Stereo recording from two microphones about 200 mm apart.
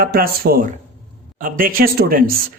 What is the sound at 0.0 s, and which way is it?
Speech, 50° right (ahead or behind).